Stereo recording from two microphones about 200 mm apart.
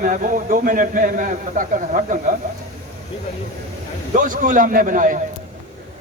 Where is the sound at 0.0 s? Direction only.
40° right (ahead or behind).